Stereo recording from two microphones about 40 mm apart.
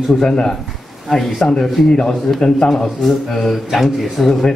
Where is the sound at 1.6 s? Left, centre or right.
Left.